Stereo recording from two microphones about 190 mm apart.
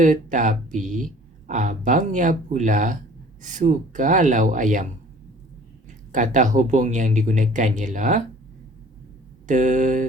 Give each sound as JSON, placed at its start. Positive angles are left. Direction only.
{"t": 0.0, "sound": "speech", "side_deg": -45}
{"t": 6.1, "sound": "speech", "side_deg": -40}
{"t": 9.5, "sound": "speech", "side_deg": -40}